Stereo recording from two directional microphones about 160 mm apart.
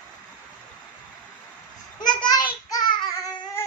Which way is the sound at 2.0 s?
25° left (ahead or behind).